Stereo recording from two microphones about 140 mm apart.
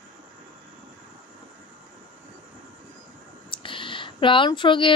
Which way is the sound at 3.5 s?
35° left (ahead or behind).